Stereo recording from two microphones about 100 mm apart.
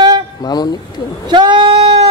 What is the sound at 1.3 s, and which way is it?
Speech, 55° right (ahead or behind).